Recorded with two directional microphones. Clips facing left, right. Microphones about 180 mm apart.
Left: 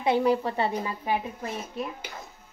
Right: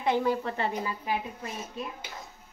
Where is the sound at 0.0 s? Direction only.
15° left (ahead or behind).